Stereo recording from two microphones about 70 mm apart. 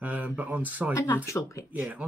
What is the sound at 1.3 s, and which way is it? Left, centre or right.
Speech, left.